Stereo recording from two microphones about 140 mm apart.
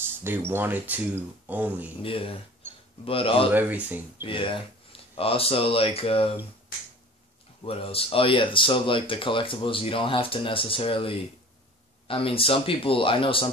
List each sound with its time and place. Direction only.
0.2 s speech: 15° right (ahead or behind)
2.0 s speech: 40° left (ahead or behind)
3.5 s speech: 10° right (ahead or behind)
4.2 s speech: 40° left (ahead or behind)
7.6 s speech: 45° left (ahead or behind)